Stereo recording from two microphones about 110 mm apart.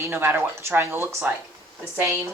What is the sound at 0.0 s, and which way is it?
Speech, 20° right (ahead or behind).